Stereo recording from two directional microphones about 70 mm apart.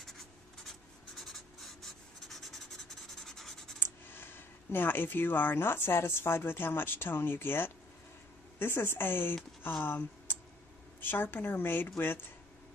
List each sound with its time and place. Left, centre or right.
0.7 s writing: centre
3.8 s writing: left
4.7 s speech: left
9.6 s a sound: left
11.0 s a woman's voice: left